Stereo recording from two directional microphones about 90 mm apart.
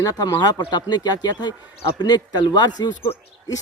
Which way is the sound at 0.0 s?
45° left (ahead or behind).